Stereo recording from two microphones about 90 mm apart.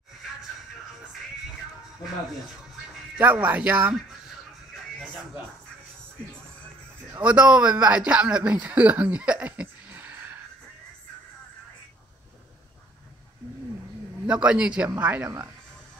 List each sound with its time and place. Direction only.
3.2 s speech: 20° right (ahead or behind)
7.2 s a man's voice: 15° right (ahead or behind)
14.2 s a man's voice: 10° right (ahead or behind)